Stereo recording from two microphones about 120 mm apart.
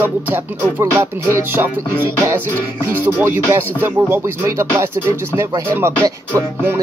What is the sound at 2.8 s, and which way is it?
Speech, 20° right (ahead or behind).